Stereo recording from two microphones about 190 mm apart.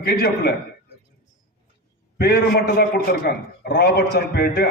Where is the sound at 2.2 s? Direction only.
55° left (ahead or behind).